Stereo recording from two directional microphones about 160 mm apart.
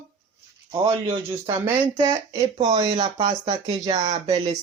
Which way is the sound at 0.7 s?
40° right (ahead or behind).